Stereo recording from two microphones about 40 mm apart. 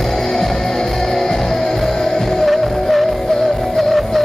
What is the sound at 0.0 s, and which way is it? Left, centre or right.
Music, centre.